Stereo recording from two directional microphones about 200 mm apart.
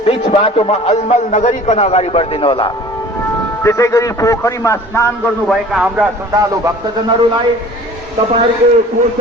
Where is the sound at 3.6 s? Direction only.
15° left (ahead or behind).